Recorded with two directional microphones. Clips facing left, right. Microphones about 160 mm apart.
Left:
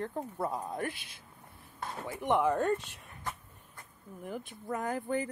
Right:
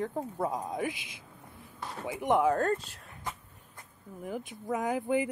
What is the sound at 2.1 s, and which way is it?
Speech, 10° right (ahead or behind).